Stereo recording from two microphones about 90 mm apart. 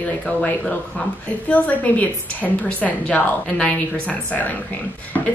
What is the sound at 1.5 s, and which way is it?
A woman's voice, 15° left (ahead or behind).